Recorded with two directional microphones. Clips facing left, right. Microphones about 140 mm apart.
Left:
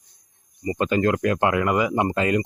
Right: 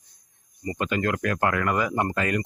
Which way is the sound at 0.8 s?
30° left (ahead or behind).